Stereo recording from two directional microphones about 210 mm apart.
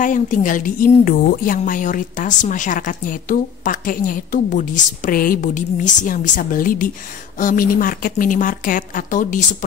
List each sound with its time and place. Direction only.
0.0 s a woman's voice: 40° left (ahead or behind)